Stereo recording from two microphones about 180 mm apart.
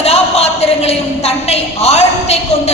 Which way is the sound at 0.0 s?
35° left (ahead or behind).